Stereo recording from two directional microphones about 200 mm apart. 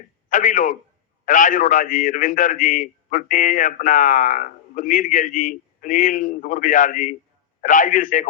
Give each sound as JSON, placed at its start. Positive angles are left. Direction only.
{"t": 0.3, "sound": "a man's voice", "side_deg": 40}